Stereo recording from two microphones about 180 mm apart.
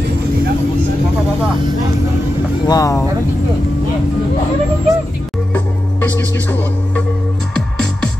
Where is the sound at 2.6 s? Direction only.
20° left (ahead or behind).